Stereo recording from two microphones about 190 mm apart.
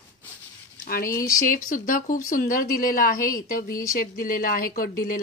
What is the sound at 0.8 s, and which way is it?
A woman's voice, 50° left (ahead or behind).